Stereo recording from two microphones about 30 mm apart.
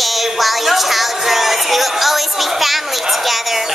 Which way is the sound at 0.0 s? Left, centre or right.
Centre.